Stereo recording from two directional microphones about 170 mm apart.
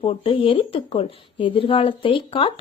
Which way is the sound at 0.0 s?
35° left (ahead or behind).